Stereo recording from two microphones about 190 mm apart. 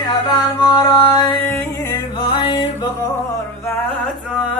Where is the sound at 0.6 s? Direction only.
20° left (ahead or behind).